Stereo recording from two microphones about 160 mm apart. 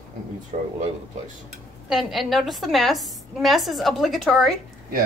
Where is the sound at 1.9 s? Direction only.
Centre (ahead or behind).